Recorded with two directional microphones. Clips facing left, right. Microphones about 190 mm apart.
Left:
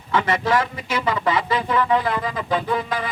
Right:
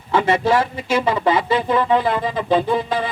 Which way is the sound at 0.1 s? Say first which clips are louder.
Right 4 dB; 30° right (ahead or behind).